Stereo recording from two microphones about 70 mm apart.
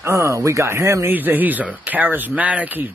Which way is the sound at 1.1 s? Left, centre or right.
Right.